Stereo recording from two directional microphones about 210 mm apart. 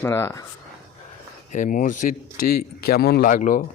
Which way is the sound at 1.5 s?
40° left (ahead or behind).